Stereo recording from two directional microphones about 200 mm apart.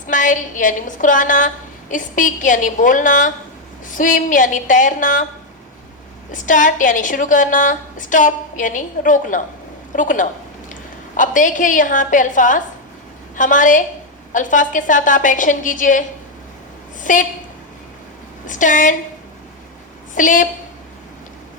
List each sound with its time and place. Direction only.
0.1 s a woman's voice: 40° left (ahead or behind)
6.3 s a woman's voice: 40° left (ahead or behind)
18.4 s a woman's voice: 40° left (ahead or behind)
20.1 s a woman's voice: 40° left (ahead or behind)